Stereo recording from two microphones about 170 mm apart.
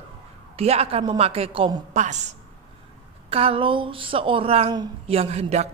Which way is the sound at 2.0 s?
45° right (ahead or behind).